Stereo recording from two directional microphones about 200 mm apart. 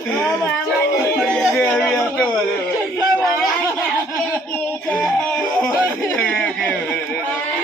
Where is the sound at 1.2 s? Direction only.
Centre (ahead or behind).